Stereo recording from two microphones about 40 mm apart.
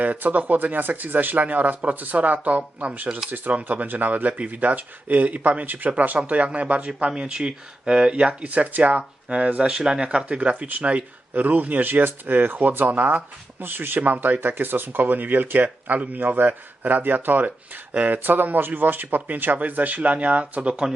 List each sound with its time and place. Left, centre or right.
0.0 s speech: right
3.2 s speech: right
6.1 s speech: right
9.6 s speech: centre
10.0 s speech: right
13.6 s speech: right
14.0 s speech: right
14.4 s speech: right
18.2 s speech: right
20.6 s speech: right